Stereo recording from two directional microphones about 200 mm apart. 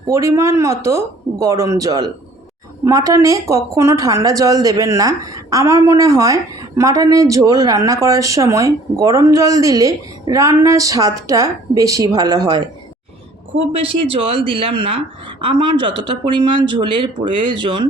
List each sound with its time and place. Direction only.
0.1 s speech: 15° right (ahead or behind)
13.8 s speech: 25° right (ahead or behind)